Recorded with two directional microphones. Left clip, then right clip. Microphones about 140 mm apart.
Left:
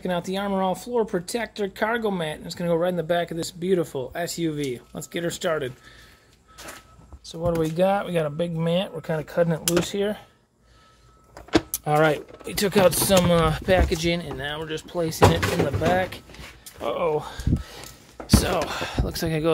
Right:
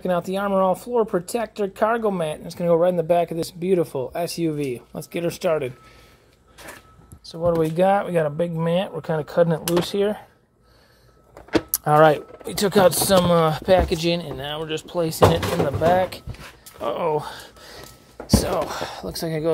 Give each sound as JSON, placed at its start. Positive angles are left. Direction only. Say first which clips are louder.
{"t": 0.0, "sound": "speech", "louder": "right 4 dB", "side_deg": -10}
{"t": 7.3, "sound": "speech", "louder": "right 3 dB", "side_deg": -10}
{"t": 9.8, "sound": "speech", "louder": "right 4 dB", "side_deg": -5}
{"t": 11.5, "sound": "speech", "louder": "right 4 dB", "side_deg": -5}
{"t": 16.8, "sound": "speech", "louder": "right 1 dB", "side_deg": -20}
{"t": 18.2, "sound": "speech", "louder": "right 1 dB", "side_deg": 20}